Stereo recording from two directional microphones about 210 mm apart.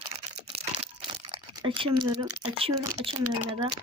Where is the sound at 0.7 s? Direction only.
25° right (ahead or behind).